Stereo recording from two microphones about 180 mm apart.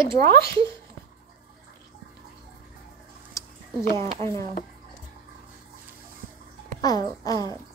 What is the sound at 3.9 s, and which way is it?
Speech, 15° left (ahead or behind).